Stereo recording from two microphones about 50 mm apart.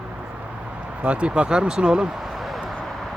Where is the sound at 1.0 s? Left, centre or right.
Right.